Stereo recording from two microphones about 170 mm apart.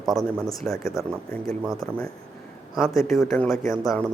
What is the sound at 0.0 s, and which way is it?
Speech, centre (ahead or behind).